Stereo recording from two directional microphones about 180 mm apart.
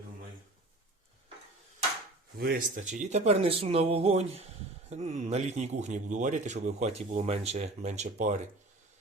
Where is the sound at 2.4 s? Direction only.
55° right (ahead or behind).